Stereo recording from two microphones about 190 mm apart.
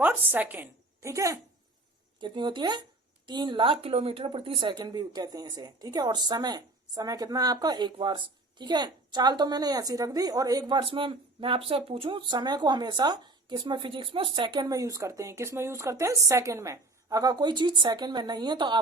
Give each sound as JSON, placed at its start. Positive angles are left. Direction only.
{"t": 0.0, "sound": "a woman's voice", "side_deg": -10}